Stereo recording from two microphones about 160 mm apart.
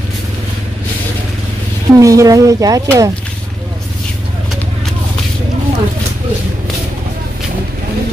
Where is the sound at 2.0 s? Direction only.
20° right (ahead or behind).